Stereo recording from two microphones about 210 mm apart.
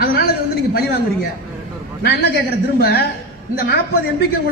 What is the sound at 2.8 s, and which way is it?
Speech, 50° left (ahead or behind).